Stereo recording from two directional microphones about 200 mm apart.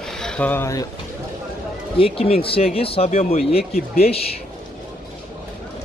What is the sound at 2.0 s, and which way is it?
Speech, 30° left (ahead or behind).